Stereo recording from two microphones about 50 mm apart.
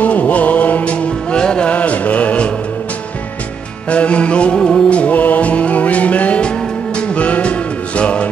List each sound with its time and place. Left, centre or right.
0.0 s music: left
1.8 s mantra: left
3.9 s music: left
4.6 s music: centre
4.8 s music: left